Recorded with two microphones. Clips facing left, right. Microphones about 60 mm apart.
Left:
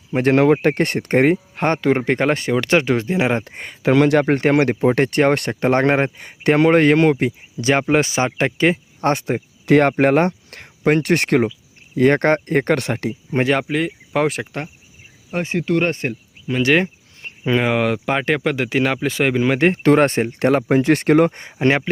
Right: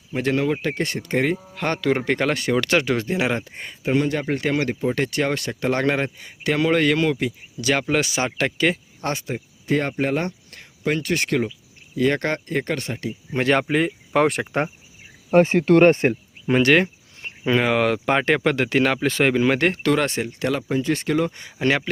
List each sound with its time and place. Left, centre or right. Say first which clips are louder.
0.1 s speech: left 8 dB; left
3.8 s speech: left 7 dB; left
9.0 s speech: left 8 dB; left
9.6 s speech: left 8 dB; left
12.7 s speech: left 7 dB; left
13.5 s speech: right 4 dB; centre
15.3 s speech: right 5 dB; right
15.9 s speech: right 6 dB; right
16.6 s speech: left 1 dB; centre
19.5 s speech: left 4 dB; centre
19.8 s speech: left 6 dB; left